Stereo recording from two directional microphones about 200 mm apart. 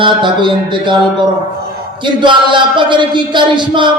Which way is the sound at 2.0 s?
25° right (ahead or behind).